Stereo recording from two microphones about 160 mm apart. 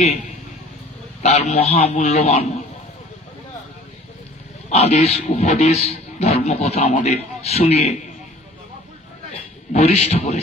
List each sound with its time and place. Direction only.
1.2 s a man's voice: 40° left (ahead or behind)
4.6 s a man's voice: 45° left (ahead or behind)
9.3 s a man's voice: 40° left (ahead or behind)